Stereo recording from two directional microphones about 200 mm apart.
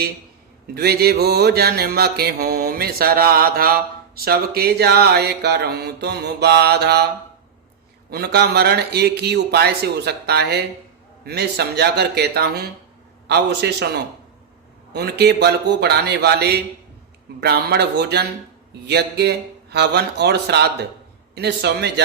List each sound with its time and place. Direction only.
0.7 s mantra: 50° right (ahead or behind)
8.1 s speech: 50° right (ahead or behind)
17.4 s mantra: 55° right (ahead or behind)
18.7 s speech: 55° right (ahead or behind)